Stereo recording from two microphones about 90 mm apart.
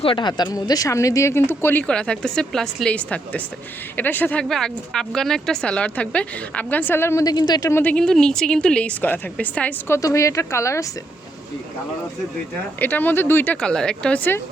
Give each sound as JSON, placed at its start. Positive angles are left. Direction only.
{"t": 0.0, "sound": "speech", "side_deg": 70}
{"t": 1.9, "sound": "speech", "side_deg": 10}
{"t": 7.3, "sound": "speech", "side_deg": 50}
{"t": 7.7, "sound": "speech", "side_deg": 25}
{"t": 7.9, "sound": "speech", "side_deg": 10}
{"t": 9.8, "sound": "speech", "side_deg": 35}
{"t": 12.8, "sound": "speech", "side_deg": 20}
{"t": 13.6, "sound": "speech", "side_deg": 10}